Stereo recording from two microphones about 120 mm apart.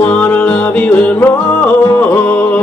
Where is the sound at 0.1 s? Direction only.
10° left (ahead or behind).